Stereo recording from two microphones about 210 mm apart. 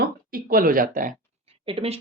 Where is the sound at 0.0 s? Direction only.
40° right (ahead or behind).